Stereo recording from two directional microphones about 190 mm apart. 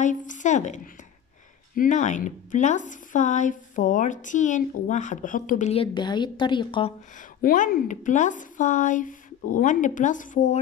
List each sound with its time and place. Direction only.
0.0 s speech: 40° left (ahead or behind)
1.8 s a woman's voice: 40° left (ahead or behind); by 6.9 s 25° left (ahead or behind)
7.4 s speech: 45° left (ahead or behind)